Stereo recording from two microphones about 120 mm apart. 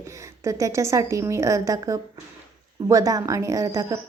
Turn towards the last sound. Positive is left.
turn(degrees=-30)  # may be behind; listen again after turning